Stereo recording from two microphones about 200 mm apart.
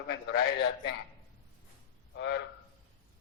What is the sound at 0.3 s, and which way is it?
Speech, 55° left (ahead or behind).